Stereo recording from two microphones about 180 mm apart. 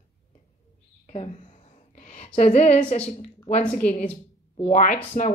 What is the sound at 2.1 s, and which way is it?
A woman's voice, 35° left (ahead or behind).